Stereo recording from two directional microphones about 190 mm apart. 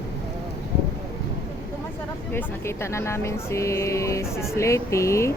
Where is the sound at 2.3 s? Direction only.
15° left (ahead or behind).